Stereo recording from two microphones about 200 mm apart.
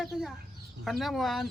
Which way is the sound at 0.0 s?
Centre (ahead or behind).